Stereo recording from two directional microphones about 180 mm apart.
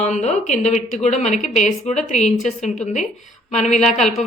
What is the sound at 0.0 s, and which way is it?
A woman's voice, 40° left (ahead or behind).